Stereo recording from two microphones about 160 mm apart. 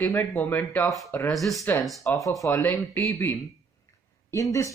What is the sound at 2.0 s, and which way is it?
Speech, 20° left (ahead or behind).